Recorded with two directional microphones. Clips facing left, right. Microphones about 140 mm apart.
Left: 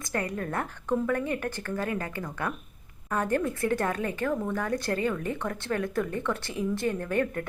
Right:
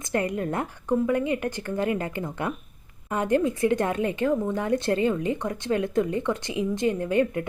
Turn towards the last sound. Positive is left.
turn(degrees=-15)  # may be behind; listen again after turning